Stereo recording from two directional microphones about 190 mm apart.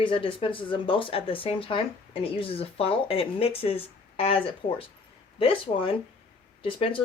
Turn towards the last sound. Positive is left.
turn(degrees=25)  # may be behind; listen again after turning